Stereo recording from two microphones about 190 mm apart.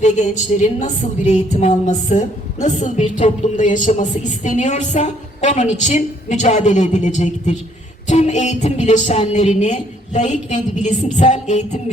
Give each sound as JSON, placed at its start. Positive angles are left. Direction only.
{"t": 0.0, "sound": "music", "side_deg": 40}